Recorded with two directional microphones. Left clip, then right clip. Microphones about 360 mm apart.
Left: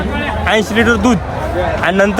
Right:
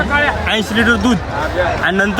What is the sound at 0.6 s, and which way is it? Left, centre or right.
Speech, centre.